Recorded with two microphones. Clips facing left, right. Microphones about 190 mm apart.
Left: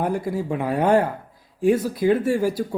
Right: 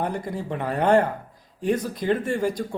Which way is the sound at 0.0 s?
5° left (ahead or behind).